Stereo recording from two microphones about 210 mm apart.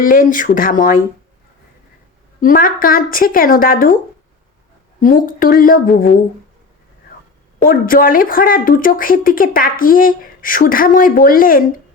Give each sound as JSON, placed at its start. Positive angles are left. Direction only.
{"t": 0.0, "sound": "speech", "side_deg": 40}
{"t": 2.4, "sound": "speech", "side_deg": 40}
{"t": 4.9, "sound": "speech", "side_deg": 40}
{"t": 7.6, "sound": "speech", "side_deg": 40}